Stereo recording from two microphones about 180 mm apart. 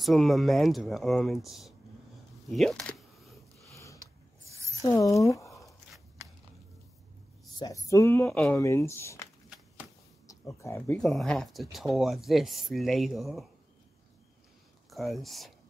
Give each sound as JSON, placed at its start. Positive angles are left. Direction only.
{"t": 0.0, "sound": "speech", "side_deg": 0}
{"t": 2.5, "sound": "a sound", "side_deg": 0}
{"t": 3.7, "sound": "a sound", "side_deg": 15}
{"t": 4.5, "sound": "a sound", "side_deg": -15}
{"t": 4.8, "sound": "speech", "side_deg": 20}
{"t": 7.5, "sound": "speech", "side_deg": 20}
{"t": 8.3, "sound": "speech", "side_deg": 0}
{"t": 8.5, "sound": "speech", "side_deg": 15}
{"t": 11.0, "sound": "speech", "side_deg": 0}
{"t": 14.9, "sound": "speech", "side_deg": 0}